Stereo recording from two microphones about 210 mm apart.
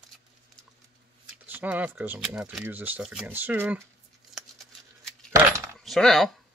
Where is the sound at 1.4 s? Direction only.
10° right (ahead or behind).